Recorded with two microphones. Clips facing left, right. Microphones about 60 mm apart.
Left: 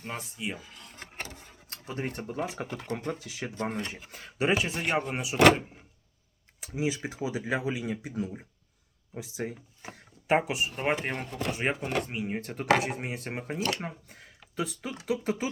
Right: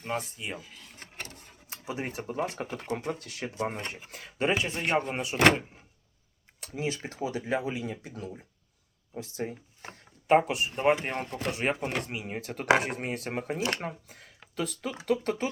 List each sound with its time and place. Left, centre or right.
0.0 s speech: centre
1.1 s a sound: centre
1.6 s speech: centre
3.2 s speech: centre
4.4 s speech: centre